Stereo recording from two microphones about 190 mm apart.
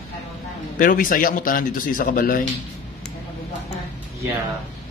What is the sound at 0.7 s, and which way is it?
Speech, 45° left (ahead or behind).